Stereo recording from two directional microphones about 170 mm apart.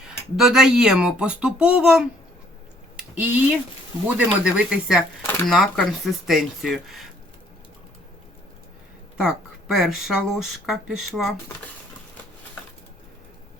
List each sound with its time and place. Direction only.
0.0 s speech: 5° right (ahead or behind)
3.2 s speech: 10° right (ahead or behind)
9.1 s speech: centre (ahead or behind)